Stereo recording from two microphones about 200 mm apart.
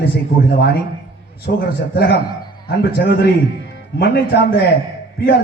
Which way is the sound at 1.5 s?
50° left (ahead or behind).